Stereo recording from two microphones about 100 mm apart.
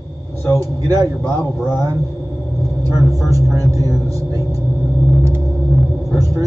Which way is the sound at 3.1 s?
35° right (ahead or behind).